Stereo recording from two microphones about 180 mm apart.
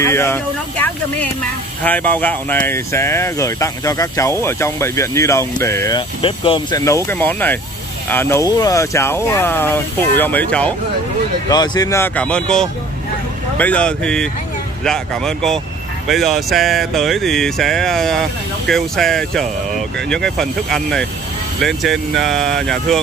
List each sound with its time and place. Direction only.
0.0 s speech: 15° left (ahead or behind)
6.8 s speech: 15° left (ahead or behind)
11.4 s speech: 20° left (ahead or behind); by 22.9 s centre (ahead or behind)